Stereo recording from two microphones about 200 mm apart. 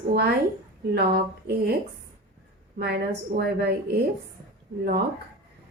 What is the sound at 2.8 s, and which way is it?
A woman's voice, 50° right (ahead or behind).